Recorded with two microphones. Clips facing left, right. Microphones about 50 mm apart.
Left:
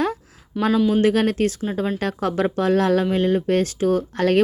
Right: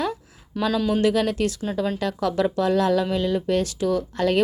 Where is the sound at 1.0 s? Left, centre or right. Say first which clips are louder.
Left 2 dB; left.